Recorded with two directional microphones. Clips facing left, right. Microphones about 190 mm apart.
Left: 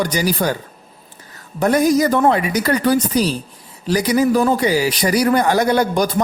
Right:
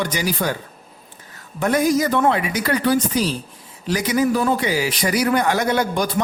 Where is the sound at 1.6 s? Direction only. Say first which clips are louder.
Left 3 dB; 40° left (ahead or behind).